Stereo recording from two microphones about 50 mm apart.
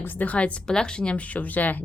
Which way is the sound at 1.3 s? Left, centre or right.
Left.